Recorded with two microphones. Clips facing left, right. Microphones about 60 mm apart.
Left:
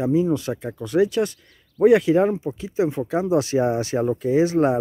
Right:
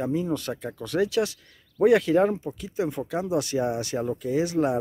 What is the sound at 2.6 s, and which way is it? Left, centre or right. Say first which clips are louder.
Speech: left 6 dB; left.